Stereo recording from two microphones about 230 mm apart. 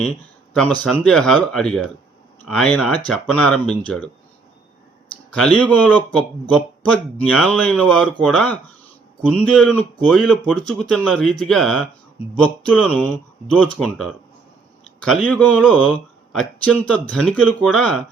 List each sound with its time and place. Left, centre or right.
0.5 s speech: centre
5.3 s speech: centre
7.2 s speech: centre
9.2 s speech: centre